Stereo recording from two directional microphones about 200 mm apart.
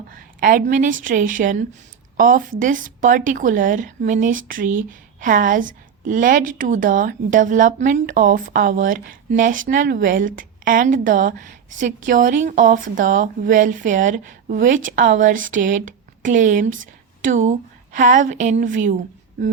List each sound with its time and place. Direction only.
0.1 s a woman's voice: 45° right (ahead or behind)